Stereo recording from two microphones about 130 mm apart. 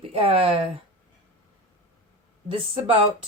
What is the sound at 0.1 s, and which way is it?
Speech, 45° right (ahead or behind).